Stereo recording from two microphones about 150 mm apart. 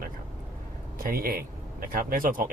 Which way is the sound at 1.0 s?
75° right (ahead or behind).